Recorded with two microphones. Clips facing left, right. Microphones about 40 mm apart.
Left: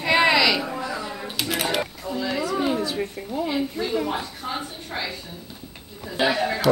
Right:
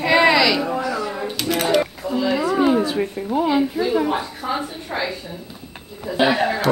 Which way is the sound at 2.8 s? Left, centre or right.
Right.